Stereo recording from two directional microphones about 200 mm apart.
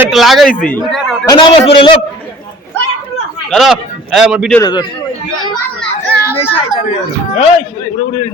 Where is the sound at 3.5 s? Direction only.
Centre (ahead or behind).